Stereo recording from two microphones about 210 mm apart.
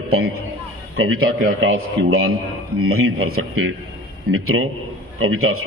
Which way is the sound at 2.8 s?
90° right.